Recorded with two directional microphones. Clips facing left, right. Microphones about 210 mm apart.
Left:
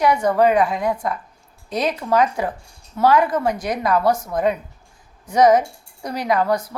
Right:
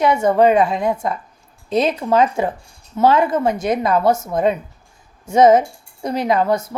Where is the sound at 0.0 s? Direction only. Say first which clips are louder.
Right 2 dB; 25° right (ahead or behind).